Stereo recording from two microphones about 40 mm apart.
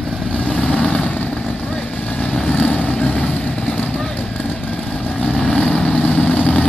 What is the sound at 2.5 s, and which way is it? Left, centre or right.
Vehicle, left.